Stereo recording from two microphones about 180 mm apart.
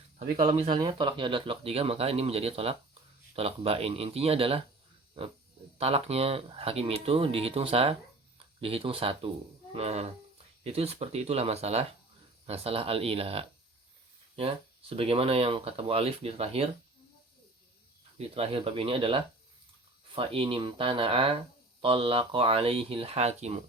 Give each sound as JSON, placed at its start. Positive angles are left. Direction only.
{"t": 0.3, "sound": "speech", "side_deg": -30}
{"t": 5.7, "sound": "speech", "side_deg": -35}
{"t": 18.2, "sound": "speech", "side_deg": -30}